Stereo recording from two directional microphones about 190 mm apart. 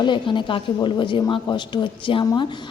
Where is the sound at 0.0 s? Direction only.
25° left (ahead or behind).